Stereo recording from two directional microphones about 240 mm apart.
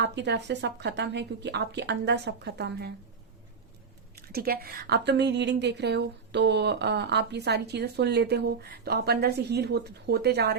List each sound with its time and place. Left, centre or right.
0.0 s a woman's voice: right
4.1 s a woman's voice: right